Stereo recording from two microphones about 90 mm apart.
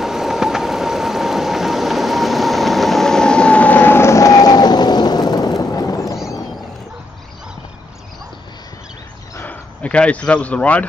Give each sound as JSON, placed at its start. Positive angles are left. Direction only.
{"t": 0.0, "sound": "vehicle", "side_deg": -5}
{"t": 9.4, "sound": "speech", "side_deg": 15}